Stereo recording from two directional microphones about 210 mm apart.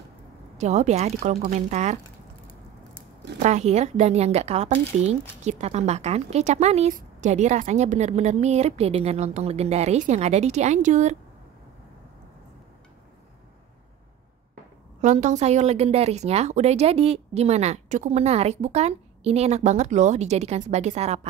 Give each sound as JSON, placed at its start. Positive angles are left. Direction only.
{"t": 0.6, "sound": "a woman's voice", "side_deg": -35}
{"t": 3.3, "sound": "a woman's voice", "side_deg": -30}
{"t": 14.5, "sound": "a woman's voice", "side_deg": -35}